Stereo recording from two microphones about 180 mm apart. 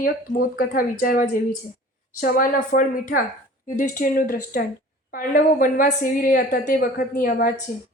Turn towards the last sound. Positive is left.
turn(degrees=55)  # may be behind; listen again after turning